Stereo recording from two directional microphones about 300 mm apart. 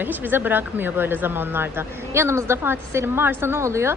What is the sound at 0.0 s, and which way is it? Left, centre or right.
A woman's voice, centre.